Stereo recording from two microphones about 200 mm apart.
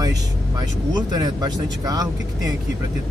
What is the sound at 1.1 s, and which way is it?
Speech, 20° right (ahead or behind).